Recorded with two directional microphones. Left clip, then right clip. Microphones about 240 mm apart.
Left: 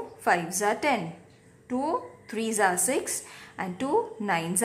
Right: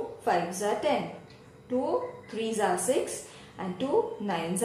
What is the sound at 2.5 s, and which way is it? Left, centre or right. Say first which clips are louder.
Speech: left 2 dB; left.